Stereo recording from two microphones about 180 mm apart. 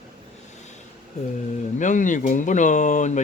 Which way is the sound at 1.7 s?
45° left (ahead or behind).